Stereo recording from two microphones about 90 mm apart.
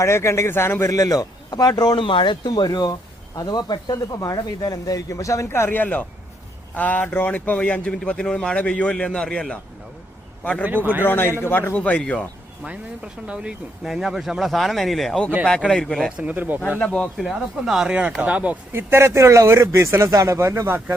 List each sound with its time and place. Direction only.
0.0 s a man's voice: 30° left (ahead or behind); by 2.5 s 65° left (ahead or behind)
2.5 s a man's voice: 50° left (ahead or behind); by 9.6 s 10° left (ahead or behind)
11.0 s a man's voice: 25° left (ahead or behind)
13.2 s speech: 10° right (ahead or behind); by 16.1 s 5° left (ahead or behind)
16.1 s speech: 15° right (ahead or behind)
16.8 s speech: 5° left (ahead or behind); by 18.5 s 15° right (ahead or behind)
18.7 s speech: 25° right (ahead or behind)